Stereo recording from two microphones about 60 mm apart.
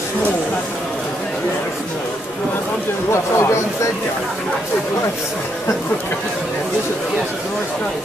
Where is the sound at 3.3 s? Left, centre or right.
Left.